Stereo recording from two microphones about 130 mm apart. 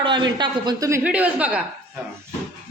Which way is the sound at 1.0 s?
10° right (ahead or behind).